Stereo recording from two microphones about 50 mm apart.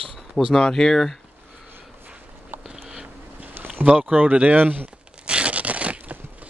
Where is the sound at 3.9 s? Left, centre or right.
Right.